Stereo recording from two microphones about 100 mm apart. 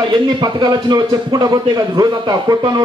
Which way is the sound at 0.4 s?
45° right (ahead or behind).